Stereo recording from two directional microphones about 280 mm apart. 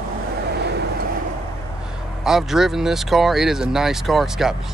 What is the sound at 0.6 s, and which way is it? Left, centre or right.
Vehicle, right.